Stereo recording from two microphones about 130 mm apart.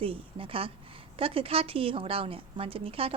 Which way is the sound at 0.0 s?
45° right (ahead or behind).